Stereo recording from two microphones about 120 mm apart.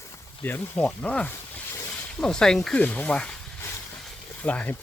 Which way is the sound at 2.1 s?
5° left (ahead or behind).